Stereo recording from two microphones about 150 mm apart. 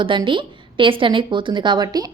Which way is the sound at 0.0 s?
35° right (ahead or behind).